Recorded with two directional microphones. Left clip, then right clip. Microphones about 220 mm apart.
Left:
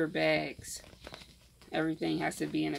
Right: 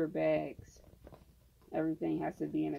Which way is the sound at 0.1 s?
20° left (ahead or behind).